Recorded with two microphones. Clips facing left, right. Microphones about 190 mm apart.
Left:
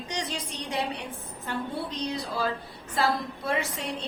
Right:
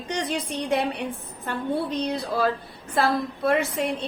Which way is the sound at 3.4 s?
60° right (ahead or behind).